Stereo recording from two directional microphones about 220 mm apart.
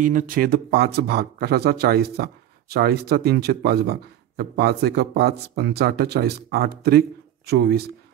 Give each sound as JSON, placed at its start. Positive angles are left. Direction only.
{"t": 0.0, "sound": "speech", "side_deg": -35}